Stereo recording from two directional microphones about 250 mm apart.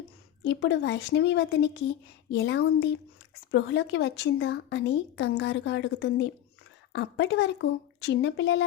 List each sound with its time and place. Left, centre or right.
0.4 s a woman's voice: left